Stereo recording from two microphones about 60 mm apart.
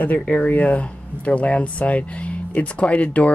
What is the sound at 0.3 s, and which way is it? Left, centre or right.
Speech, left.